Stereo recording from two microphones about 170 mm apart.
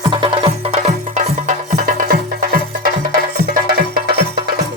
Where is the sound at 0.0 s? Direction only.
25° right (ahead or behind); by 4.1 s 60° right (ahead or behind).